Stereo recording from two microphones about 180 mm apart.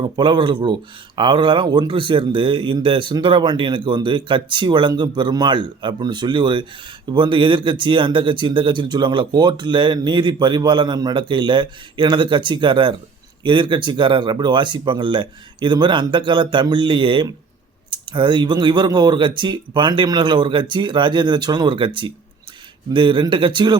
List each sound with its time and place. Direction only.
0.0 s speech: 25° right (ahead or behind)